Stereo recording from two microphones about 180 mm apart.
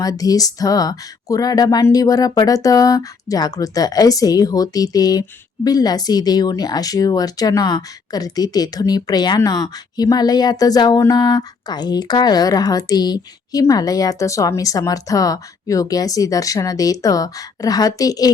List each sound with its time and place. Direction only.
0.0 s speech: 20° left (ahead or behind)